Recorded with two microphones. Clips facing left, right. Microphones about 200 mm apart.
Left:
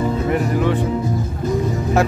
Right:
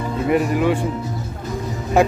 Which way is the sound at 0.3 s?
15° right (ahead or behind).